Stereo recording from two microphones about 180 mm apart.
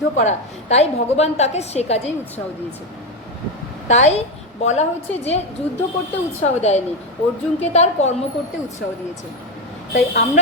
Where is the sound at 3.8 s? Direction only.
40° left (ahead or behind).